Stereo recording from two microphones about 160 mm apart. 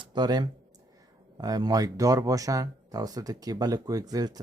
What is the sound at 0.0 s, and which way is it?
Speech, 25° right (ahead or behind).